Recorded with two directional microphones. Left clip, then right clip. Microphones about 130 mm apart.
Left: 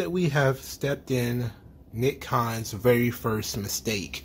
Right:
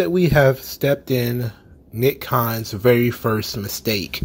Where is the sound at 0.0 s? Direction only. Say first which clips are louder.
Right 9 dB; 35° right (ahead or behind).